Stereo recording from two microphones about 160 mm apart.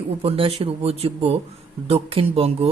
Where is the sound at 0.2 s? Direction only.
35° right (ahead or behind).